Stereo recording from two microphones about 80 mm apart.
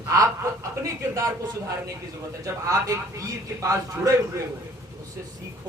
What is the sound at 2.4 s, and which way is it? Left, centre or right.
A man's voice, right.